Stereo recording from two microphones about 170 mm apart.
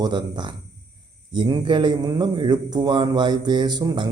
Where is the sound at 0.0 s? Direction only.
25° right (ahead or behind).